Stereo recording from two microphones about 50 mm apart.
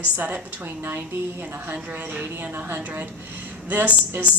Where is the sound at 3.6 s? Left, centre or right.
Right.